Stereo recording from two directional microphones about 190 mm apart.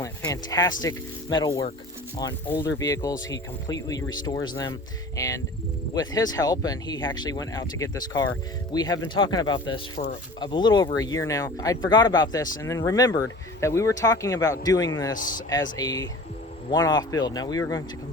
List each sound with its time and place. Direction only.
0.0 s a sound: 20° left (ahead or behind)
0.8 s speech: 20° left (ahead or behind)
15.1 s speech: 45° left (ahead or behind)
15.4 s speech: 20° left (ahead or behind)